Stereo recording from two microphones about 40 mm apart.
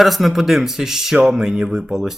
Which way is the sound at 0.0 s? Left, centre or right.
Centre.